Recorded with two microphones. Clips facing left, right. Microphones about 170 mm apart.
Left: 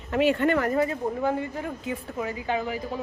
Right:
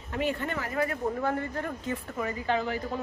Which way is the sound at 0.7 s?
20° left (ahead or behind).